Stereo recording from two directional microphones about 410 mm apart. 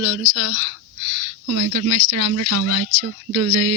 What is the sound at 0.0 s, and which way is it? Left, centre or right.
Speech, right.